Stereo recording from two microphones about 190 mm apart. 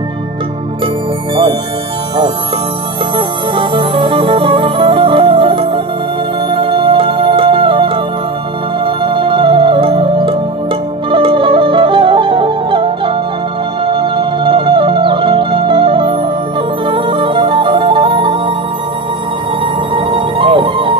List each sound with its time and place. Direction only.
3.2 s music: 25° right (ahead or behind)
19.6 s music: 25° right (ahead or behind)